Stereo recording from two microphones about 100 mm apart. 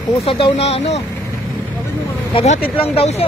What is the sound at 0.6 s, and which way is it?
Speech, 90° left.